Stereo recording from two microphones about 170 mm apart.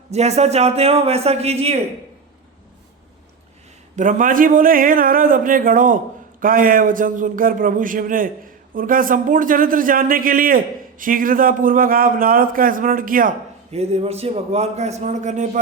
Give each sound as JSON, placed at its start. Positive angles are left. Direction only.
{"t": 0.1, "sound": "a man's voice", "side_deg": -40}
{"t": 3.9, "sound": "a man's voice", "side_deg": -50}
{"t": 13.7, "sound": "a man's voice", "side_deg": -35}